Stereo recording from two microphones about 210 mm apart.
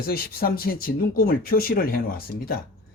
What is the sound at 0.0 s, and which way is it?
Speech, 45° left (ahead or behind).